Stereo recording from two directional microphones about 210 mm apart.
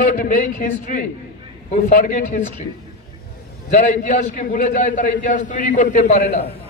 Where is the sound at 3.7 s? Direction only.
35° left (ahead or behind).